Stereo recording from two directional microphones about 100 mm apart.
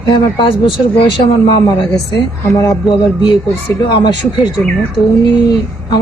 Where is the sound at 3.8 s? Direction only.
50° left (ahead or behind).